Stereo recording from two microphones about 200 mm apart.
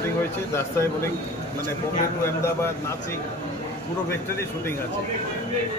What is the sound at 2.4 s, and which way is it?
Speech, 15° left (ahead or behind).